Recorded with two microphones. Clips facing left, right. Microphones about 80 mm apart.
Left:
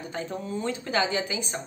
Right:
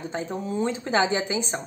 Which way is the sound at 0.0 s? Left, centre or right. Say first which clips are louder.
Right 3 dB; right.